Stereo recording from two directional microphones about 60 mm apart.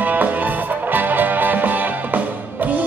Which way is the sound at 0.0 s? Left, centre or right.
Right.